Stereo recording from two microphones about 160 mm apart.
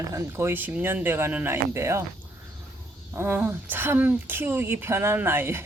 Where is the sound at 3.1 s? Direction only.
15° right (ahead or behind).